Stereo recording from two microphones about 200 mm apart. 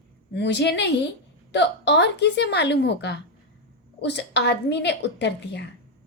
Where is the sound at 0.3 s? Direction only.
60° left (ahead or behind).